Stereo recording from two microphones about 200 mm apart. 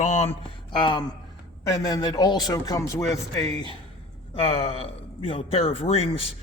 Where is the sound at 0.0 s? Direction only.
35° left (ahead or behind).